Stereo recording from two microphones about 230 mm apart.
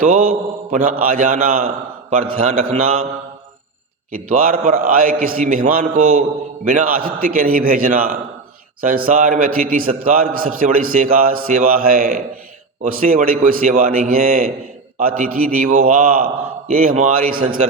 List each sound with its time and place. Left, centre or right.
0.0 s a man's voice: right
4.1 s a man's voice: right